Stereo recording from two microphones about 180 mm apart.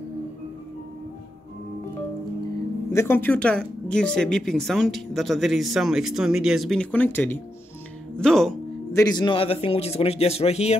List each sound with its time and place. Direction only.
2.9 s a woman's voice: 15° left (ahead or behind)
8.9 s a man's voice: 20° left (ahead or behind)